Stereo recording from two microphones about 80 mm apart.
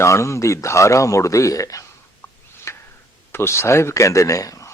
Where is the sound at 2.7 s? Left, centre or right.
Left.